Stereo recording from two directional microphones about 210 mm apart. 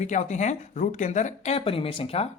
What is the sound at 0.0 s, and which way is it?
Speech, 35° left (ahead or behind).